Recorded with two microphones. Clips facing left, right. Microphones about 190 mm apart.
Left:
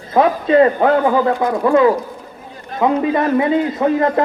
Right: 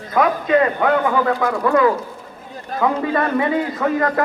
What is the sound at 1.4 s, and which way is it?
A man's voice, 20° left (ahead or behind).